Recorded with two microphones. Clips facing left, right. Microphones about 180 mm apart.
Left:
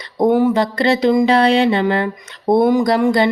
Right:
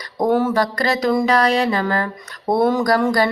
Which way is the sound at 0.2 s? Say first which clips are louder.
Left 3 dB; 15° left (ahead or behind).